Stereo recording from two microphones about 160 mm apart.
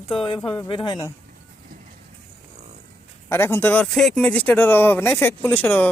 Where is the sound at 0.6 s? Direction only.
30° left (ahead or behind).